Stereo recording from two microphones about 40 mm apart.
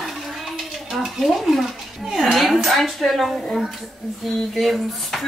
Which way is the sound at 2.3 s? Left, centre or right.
Centre.